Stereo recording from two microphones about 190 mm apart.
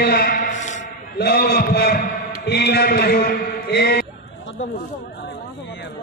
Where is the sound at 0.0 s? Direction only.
55° left (ahead or behind).